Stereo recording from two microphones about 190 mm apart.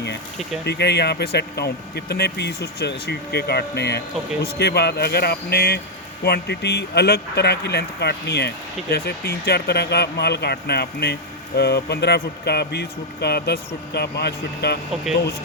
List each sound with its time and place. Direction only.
0.6 s speech: 60° left (ahead or behind)